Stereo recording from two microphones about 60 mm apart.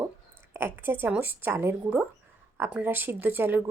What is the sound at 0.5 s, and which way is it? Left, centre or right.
Speech, right.